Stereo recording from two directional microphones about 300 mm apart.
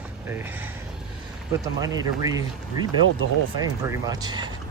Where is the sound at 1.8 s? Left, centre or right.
Centre.